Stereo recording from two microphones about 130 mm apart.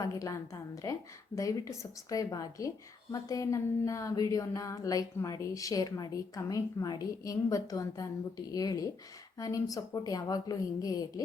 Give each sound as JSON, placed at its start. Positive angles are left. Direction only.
{"t": 0.0, "sound": "a woman's voice", "side_deg": 25}